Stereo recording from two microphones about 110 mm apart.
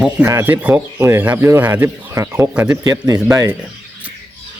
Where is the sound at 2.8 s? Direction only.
35° right (ahead or behind).